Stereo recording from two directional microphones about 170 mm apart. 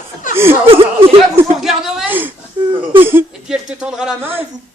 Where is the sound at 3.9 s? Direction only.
5° right (ahead or behind).